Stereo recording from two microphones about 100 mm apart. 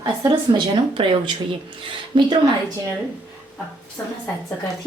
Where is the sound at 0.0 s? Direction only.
45° right (ahead or behind).